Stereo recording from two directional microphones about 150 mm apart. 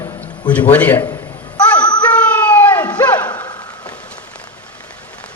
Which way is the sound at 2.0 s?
10° left (ahead or behind).